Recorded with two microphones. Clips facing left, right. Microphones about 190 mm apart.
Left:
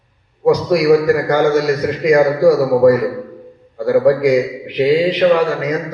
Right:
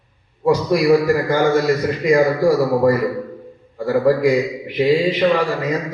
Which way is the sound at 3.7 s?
75° left (ahead or behind).